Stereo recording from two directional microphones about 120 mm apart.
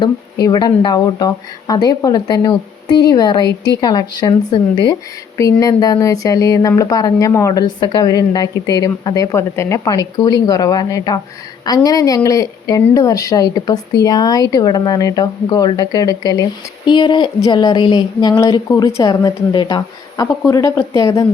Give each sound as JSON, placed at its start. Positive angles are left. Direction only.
{"t": 0.0, "sound": "speech", "side_deg": 30}
{"t": 5.4, "sound": "speech", "side_deg": 30}